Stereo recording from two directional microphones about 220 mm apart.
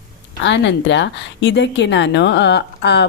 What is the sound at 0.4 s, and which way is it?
Speech, 55° left (ahead or behind).